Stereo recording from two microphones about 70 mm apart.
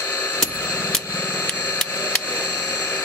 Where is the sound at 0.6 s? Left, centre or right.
Left.